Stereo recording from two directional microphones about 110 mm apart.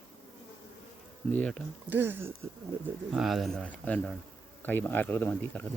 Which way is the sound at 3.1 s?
Centre (ahead or behind).